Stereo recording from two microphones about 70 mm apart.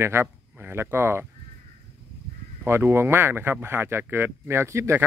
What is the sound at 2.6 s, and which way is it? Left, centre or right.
Speech, right.